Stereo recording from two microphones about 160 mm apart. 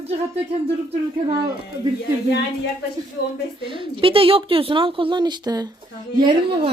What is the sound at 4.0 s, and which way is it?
Speech, 35° right (ahead or behind).